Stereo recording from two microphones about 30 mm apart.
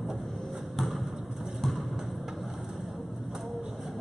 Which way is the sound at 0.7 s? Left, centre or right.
Centre.